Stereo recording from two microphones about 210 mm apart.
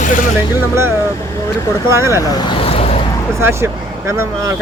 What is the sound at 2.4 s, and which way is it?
Vehicle, 25° left (ahead or behind).